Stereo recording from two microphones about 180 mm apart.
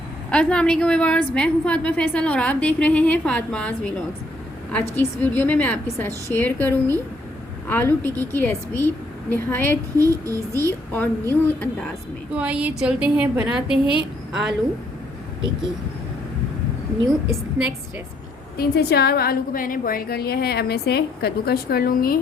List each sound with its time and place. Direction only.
0.3 s a woman's voice: 5° left (ahead or behind)
10.0 s a woman's voice: 20° right (ahead or behind)
10.6 s a woman's voice: 10° left (ahead or behind)
12.3 s a woman's voice: 5° right (ahead or behind)
18.5 s a woman's voice: 60° left (ahead or behind)